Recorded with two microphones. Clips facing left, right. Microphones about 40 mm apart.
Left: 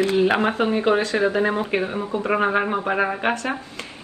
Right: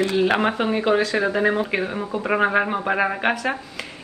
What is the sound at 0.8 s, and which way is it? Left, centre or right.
A woman's voice, centre.